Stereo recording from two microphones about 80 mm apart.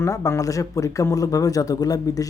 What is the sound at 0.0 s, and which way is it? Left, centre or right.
Speech, left.